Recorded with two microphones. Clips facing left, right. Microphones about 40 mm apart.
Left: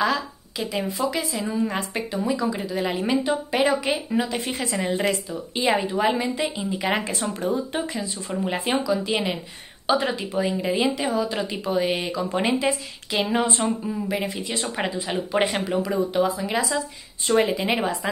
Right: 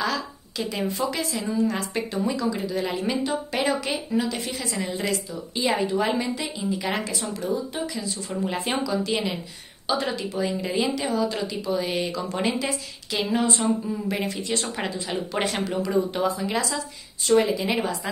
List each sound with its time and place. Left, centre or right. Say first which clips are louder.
0.0 s speech: left 4 dB; centre
2.0 s speech: left 1 dB; centre
4.4 s a woman's voice: left 3 dB; left
5.8 s a woman's voice: left 1 dB; centre
7.1 s speech: left 2 dB; left
8.3 s a woman's voice: left 3 dB; left
11.4 s a woman's voice: left 3 dB; left
13.6 s speech: even; centre
16.1 s speech: left 2 dB; centre
17.2 s a woman's voice: even; left